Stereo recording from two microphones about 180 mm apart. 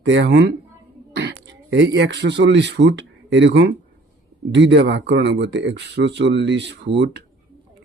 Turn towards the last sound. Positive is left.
turn(degrees=-80)